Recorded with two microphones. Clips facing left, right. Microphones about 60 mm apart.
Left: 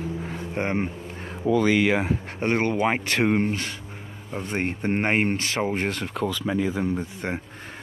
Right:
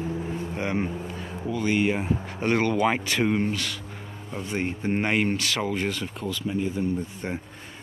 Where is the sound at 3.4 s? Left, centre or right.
Left.